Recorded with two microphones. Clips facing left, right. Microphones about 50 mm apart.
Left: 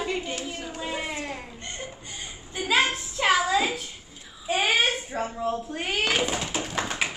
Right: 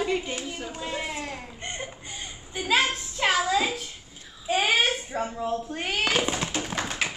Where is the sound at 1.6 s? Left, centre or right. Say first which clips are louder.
Right 4 dB; right.